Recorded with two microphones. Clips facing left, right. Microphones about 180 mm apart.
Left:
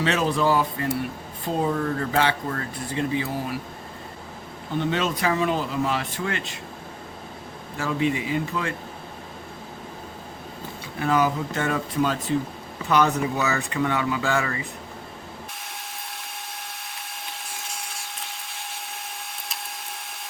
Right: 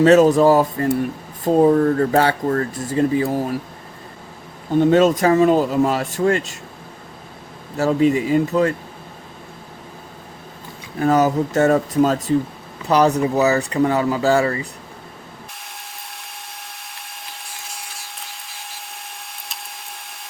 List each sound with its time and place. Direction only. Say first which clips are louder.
0.0 s speech: right 11 dB; 45° right (ahead or behind)
4.7 s speech: right 11 dB; 45° right (ahead or behind)
7.8 s speech: right 8 dB; 40° right (ahead or behind)
11.0 s speech: right 6 dB; 40° right (ahead or behind)
16.9 s a sound: even; centre (ahead or behind)